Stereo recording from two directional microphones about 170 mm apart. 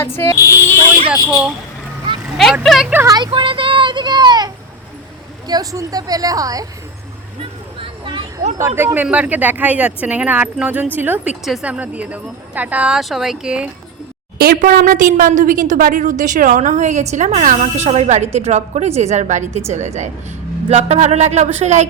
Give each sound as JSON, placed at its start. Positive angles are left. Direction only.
{"t": 0.0, "sound": "a sound", "side_deg": 15}
{"t": 1.1, "sound": "speech", "side_deg": -10}
{"t": 2.9, "sound": "a woman's voice", "side_deg": -15}
{"t": 7.8, "sound": "a sound", "side_deg": -30}
{"t": 8.6, "sound": "speech", "side_deg": -15}
{"t": 14.3, "sound": "a woman's voice", "side_deg": -60}